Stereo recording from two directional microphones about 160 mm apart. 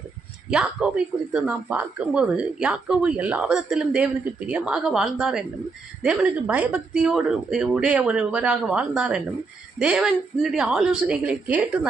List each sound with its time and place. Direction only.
0.5 s speech: 5° right (ahead or behind)